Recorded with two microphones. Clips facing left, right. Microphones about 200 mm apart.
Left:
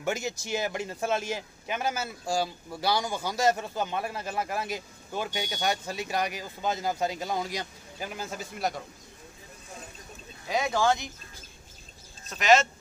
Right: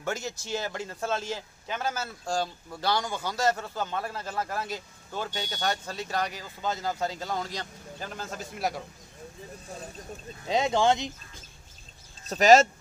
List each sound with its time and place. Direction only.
0.0 s speech: 15° left (ahead or behind); by 8.8 s 5° right (ahead or behind)
10.5 s speech: 25° right (ahead or behind)
12.3 s speech: 40° right (ahead or behind)